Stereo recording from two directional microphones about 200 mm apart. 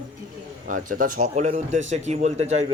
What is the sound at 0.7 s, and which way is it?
A man's voice, 40° right (ahead or behind).